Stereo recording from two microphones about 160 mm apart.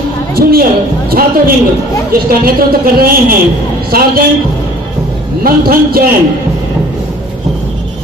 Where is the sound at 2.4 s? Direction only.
65° right (ahead or behind).